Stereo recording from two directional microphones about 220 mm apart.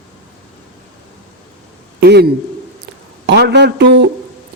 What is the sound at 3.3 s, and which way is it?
Speech, 50° right (ahead or behind).